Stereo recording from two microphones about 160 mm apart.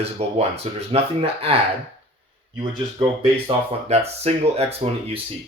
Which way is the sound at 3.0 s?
35° right (ahead or behind).